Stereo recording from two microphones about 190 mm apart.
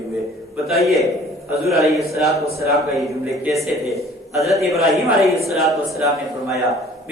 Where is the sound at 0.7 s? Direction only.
Centre (ahead or behind).